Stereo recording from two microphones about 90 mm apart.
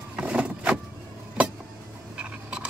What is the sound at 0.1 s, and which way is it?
Vehicle, 15° right (ahead or behind).